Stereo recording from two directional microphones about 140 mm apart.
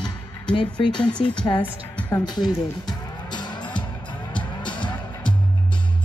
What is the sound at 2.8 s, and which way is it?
Music, 30° left (ahead or behind).